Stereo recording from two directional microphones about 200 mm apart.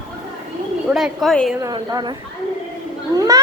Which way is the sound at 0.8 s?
Centre (ahead or behind).